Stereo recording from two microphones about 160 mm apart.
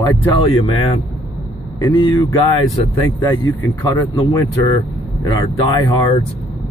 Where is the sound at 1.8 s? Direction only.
25° left (ahead or behind).